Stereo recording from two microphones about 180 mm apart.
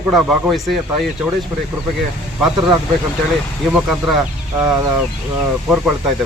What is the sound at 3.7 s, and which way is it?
A man's voice, centre (ahead or behind).